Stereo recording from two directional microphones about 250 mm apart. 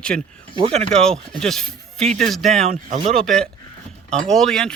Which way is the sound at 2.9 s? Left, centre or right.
Right.